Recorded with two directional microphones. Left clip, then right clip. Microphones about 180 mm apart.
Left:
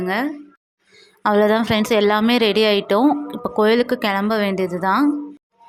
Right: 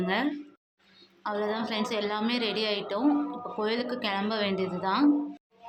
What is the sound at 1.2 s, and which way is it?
A woman's voice, 60° left (ahead or behind).